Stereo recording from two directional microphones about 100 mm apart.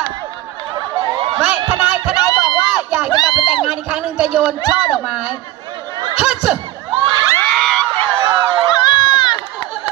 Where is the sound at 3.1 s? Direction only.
50° left (ahead or behind).